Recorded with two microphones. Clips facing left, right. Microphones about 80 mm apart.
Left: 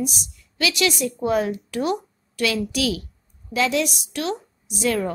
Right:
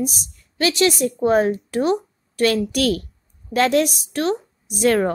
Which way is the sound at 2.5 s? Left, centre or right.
Right.